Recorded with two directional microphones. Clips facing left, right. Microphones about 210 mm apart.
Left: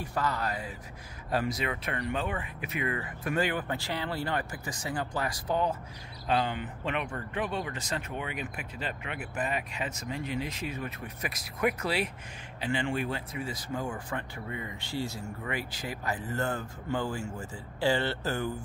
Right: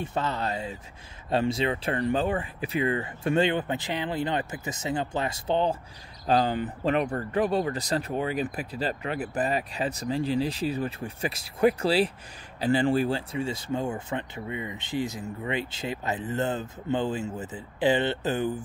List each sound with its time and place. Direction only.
0.0 s speech: 25° right (ahead or behind)